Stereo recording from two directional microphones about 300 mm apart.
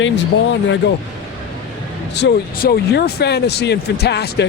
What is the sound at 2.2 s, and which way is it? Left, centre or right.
A man's voice, left.